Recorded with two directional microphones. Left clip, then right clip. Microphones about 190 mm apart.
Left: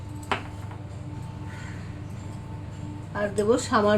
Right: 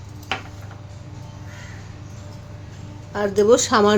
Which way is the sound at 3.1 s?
60° right (ahead or behind).